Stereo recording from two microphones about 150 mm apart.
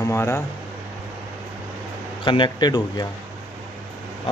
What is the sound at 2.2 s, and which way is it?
Speech, 30° left (ahead or behind).